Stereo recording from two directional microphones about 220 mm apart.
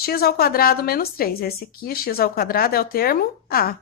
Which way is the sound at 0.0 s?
45° left (ahead or behind).